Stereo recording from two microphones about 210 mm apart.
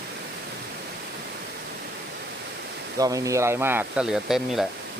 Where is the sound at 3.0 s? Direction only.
15° right (ahead or behind).